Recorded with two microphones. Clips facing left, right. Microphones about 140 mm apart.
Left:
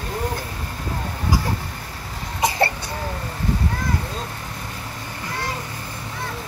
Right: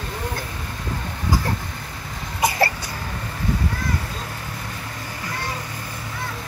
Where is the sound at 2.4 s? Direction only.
25° left (ahead or behind).